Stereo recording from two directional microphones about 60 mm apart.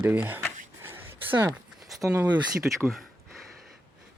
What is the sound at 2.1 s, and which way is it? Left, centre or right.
Speech, right.